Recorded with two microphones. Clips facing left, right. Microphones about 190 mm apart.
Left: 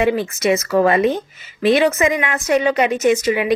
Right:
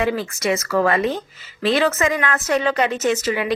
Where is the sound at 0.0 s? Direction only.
20° left (ahead or behind).